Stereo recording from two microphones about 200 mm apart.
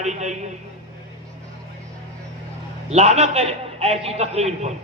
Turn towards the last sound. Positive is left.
turn(degrees=-30)  # may be behind; listen again after turning